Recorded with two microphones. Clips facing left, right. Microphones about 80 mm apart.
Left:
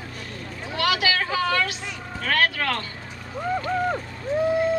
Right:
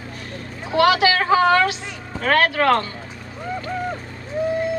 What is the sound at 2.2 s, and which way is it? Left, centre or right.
Speech, right.